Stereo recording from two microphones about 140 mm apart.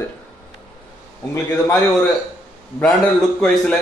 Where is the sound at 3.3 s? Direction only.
5° left (ahead or behind).